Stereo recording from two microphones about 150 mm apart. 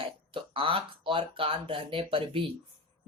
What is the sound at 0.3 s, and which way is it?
Speech, 35° right (ahead or behind).